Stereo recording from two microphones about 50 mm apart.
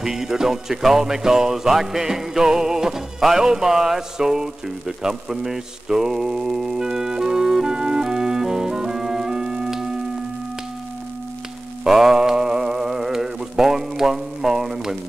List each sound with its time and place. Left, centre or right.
0.0 s music: centre
11.8 s mantra: centre